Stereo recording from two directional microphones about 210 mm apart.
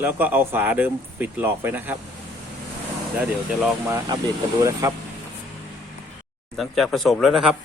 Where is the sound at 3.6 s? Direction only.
15° right (ahead or behind).